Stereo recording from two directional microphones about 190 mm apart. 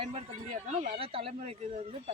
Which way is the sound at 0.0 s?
35° right (ahead or behind).